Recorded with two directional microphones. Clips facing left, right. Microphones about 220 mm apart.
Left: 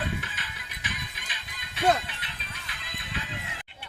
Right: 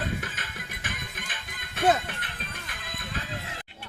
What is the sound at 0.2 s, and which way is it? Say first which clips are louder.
Music: right 3 dB; 50° right (ahead or behind).